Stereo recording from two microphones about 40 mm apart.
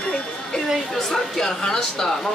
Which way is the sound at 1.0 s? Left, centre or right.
Centre.